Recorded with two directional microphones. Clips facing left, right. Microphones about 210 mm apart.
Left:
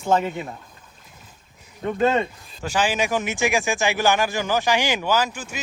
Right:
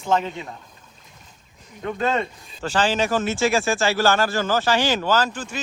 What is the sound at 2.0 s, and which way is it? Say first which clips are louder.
Speech: left 3 dB; 15° left (ahead or behind).